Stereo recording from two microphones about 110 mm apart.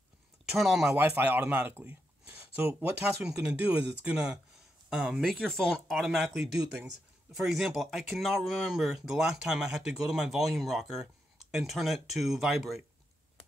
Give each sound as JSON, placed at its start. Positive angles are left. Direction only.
{"t": 0.5, "sound": "speech", "side_deg": -5}
{"t": 0.9, "sound": "speech", "side_deg": -15}
{"t": 3.2, "sound": "speech", "side_deg": -5}